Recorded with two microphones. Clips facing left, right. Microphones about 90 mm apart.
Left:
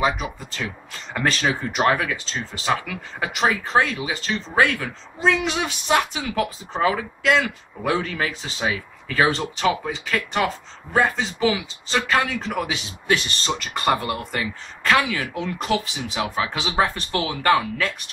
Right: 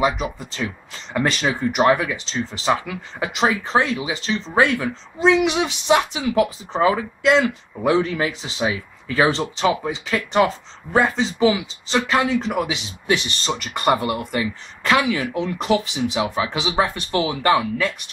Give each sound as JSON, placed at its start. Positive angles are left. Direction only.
{"t": 0.1, "sound": "speech", "side_deg": -20}